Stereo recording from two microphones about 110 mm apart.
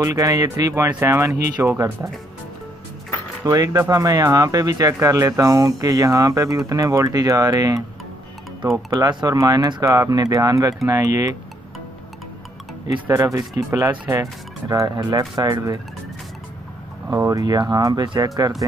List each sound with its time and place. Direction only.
0.0 s speech: 30° right (ahead or behind)
3.4 s speech: 30° right (ahead or behind)
12.8 s speech: 45° right (ahead or behind)
13.1 s speech: 30° right (ahead or behind)
17.1 s speech: 35° right (ahead or behind)